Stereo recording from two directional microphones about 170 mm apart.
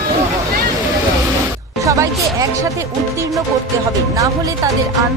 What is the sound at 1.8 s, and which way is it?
Speech, 20° right (ahead or behind).